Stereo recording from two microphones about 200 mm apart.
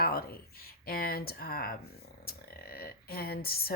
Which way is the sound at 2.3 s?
50° left (ahead or behind).